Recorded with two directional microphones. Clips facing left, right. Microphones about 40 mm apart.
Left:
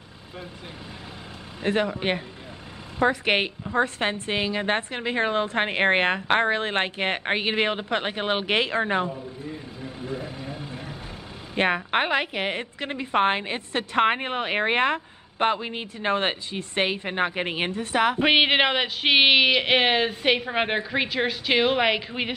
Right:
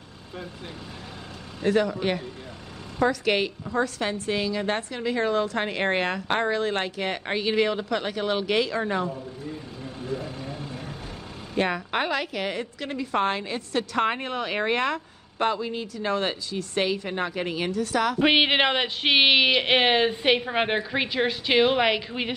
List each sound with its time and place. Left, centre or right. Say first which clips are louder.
1.6 s a woman's voice: right 2 dB; left
9.1 s vehicle: even; centre
11.5 s a woman's voice: left 3 dB; left
18.2 s speech: right 1 dB; centre